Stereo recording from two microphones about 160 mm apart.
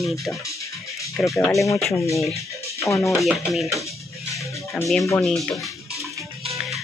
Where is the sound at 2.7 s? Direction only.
20° left (ahead or behind).